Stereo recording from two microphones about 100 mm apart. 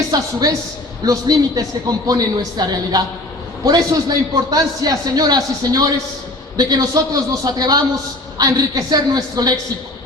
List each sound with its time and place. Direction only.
0.1 s a woman's voice: 40° right (ahead or behind)